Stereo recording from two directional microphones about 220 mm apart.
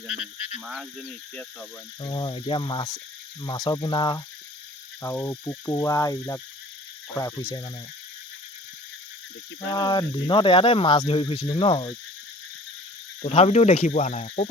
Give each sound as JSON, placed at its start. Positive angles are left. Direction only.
{"t": 0.3, "sound": "speech", "side_deg": 25}
{"t": 0.6, "sound": "speech", "side_deg": 0}
{"t": 2.0, "sound": "speech", "side_deg": 20}
{"t": 9.7, "sound": "speech", "side_deg": 20}
{"t": 13.2, "sound": "speech", "side_deg": 30}